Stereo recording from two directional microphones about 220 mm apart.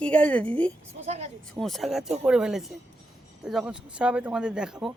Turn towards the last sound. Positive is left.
turn(degrees=-5)  # may be behind; listen again after turning